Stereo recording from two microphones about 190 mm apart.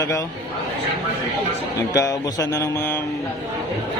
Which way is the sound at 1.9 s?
15° left (ahead or behind).